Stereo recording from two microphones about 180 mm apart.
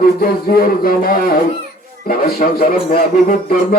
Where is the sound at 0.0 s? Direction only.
55° left (ahead or behind).